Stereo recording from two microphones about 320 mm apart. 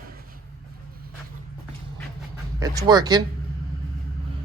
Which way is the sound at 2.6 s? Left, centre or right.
Centre.